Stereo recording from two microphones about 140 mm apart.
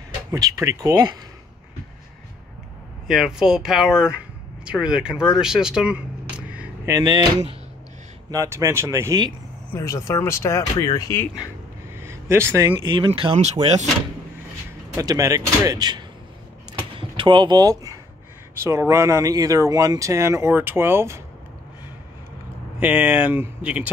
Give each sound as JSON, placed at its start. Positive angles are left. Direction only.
{"t": 0.3, "sound": "speech", "side_deg": -25}
{"t": 3.1, "sound": "speech", "side_deg": -5}
{"t": 6.9, "sound": "speech", "side_deg": -30}
{"t": 8.3, "sound": "speech", "side_deg": -20}
{"t": 9.7, "sound": "speech", "side_deg": 20}
{"t": 12.0, "sound": "a sound", "side_deg": -20}
{"t": 12.8, "sound": "speech", "side_deg": -35}
{"t": 15.0, "sound": "speech", "side_deg": -25}
{"t": 22.8, "sound": "speech", "side_deg": -10}